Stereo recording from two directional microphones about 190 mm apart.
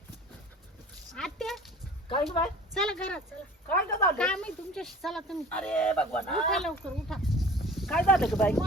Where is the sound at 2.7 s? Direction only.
5° left (ahead or behind).